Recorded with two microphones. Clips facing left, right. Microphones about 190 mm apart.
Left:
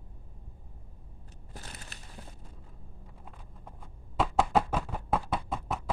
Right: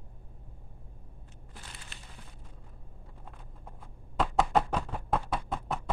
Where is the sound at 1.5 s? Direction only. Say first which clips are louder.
Left 4 dB; 40° left (ahead or behind).